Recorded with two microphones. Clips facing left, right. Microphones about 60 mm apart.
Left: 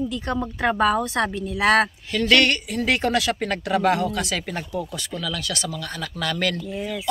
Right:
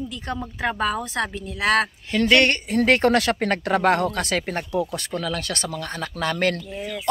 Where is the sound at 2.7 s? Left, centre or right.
Right.